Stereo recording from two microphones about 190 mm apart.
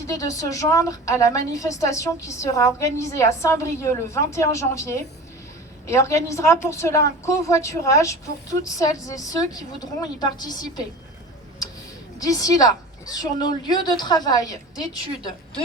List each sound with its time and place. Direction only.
0.1 s a woman's voice: 15° left (ahead or behind)
12.2 s a woman's voice: 20° left (ahead or behind)